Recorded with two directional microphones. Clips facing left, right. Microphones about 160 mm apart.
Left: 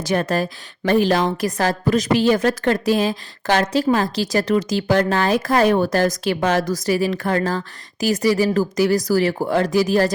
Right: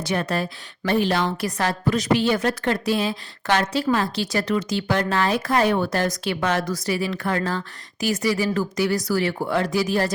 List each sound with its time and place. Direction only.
0.1 s a woman's voice: 45° left (ahead or behind)